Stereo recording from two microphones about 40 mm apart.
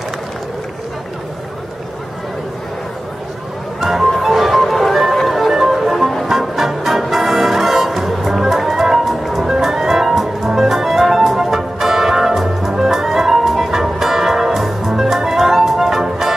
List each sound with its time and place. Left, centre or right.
3.8 s music: centre